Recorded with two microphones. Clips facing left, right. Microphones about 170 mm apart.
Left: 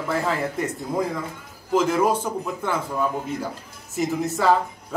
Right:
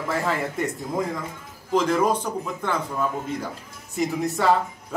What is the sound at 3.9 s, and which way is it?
Speech, centre (ahead or behind).